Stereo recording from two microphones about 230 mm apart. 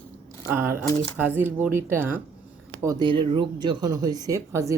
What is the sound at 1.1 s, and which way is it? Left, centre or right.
Speech, centre.